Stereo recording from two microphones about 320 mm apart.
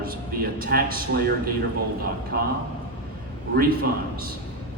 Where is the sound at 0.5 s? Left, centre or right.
Right.